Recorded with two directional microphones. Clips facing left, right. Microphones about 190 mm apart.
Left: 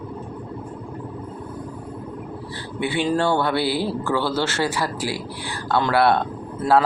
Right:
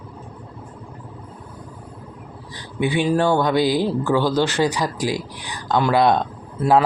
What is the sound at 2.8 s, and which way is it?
Speech, 15° right (ahead or behind).